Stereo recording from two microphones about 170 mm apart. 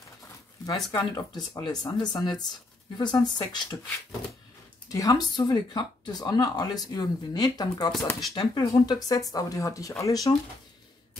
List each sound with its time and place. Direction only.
0.7 s speech: 25° left (ahead or behind)
4.9 s speech: 20° left (ahead or behind)